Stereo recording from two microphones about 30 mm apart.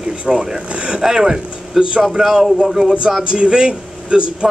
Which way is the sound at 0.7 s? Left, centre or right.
Right.